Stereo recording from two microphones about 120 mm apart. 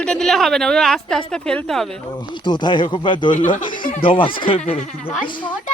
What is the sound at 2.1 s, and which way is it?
Speech, 40° left (ahead or behind).